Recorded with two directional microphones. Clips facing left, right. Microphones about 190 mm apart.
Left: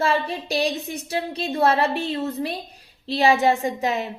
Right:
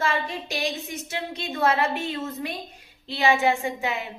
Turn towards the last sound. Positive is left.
turn(degrees=40)  # may be behind; listen again after turning